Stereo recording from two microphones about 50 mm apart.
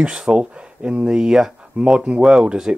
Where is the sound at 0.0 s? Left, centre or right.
Centre.